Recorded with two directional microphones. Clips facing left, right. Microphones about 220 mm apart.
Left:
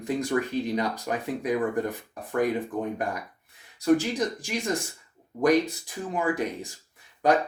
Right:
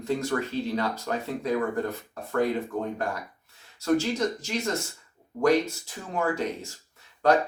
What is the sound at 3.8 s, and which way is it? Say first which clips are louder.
Speech: left 2 dB; 15° left (ahead or behind).